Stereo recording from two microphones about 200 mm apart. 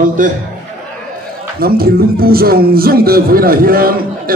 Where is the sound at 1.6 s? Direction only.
50° right (ahead or behind).